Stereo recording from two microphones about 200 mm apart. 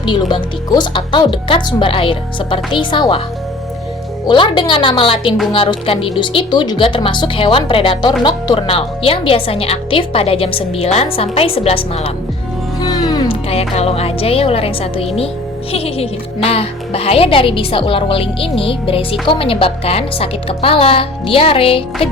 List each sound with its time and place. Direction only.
0.0 s a woman's voice: 25° left (ahead or behind)
4.3 s a woman's voice: 25° left (ahead or behind)